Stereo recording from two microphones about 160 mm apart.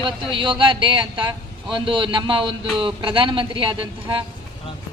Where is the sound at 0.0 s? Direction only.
30° right (ahead or behind).